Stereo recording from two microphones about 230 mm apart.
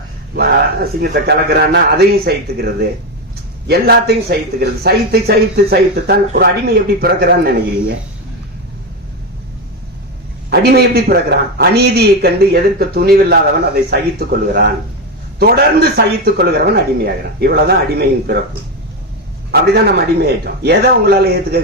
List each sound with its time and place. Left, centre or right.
0.3 s speech: right
10.5 s speech: right
19.5 s speech: right